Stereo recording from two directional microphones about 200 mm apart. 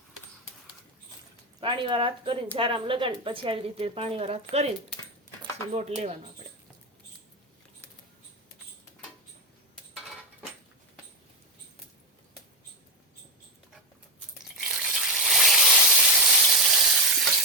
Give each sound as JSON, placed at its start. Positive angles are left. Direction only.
{"t": 1.6, "sound": "a woman's voice", "side_deg": -25}
{"t": 5.4, "sound": "speech", "side_deg": -30}
{"t": 14.7, "sound": "a sound", "side_deg": 0}